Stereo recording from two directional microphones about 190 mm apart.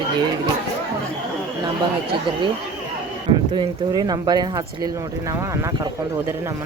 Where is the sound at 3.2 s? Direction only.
25° right (ahead or behind).